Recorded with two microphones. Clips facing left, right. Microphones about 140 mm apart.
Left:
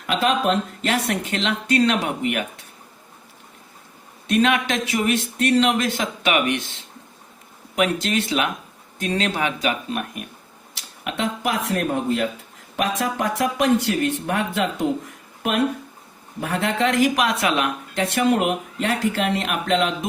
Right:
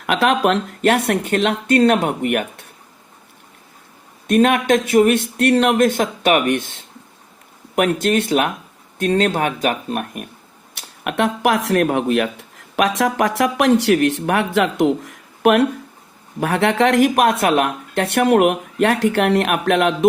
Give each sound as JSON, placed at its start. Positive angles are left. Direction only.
{"t": 0.0, "sound": "speech", "side_deg": -65}
{"t": 4.3, "sound": "speech", "side_deg": -50}
{"t": 7.8, "sound": "speech", "side_deg": -55}
{"t": 10.8, "sound": "speech", "side_deg": -60}